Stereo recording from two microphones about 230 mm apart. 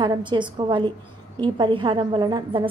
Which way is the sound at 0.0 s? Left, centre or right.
Centre.